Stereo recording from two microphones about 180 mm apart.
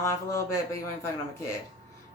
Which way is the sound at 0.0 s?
15° left (ahead or behind).